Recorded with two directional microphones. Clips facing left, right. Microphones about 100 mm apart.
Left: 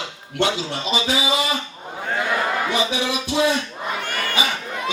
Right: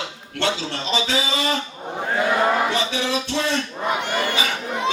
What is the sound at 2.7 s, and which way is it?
Speech, 15° left (ahead or behind).